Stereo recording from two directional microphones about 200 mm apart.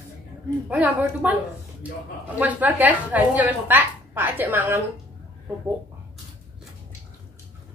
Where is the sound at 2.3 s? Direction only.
10° right (ahead or behind).